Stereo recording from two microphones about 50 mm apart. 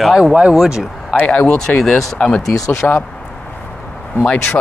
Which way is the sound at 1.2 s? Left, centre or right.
Centre.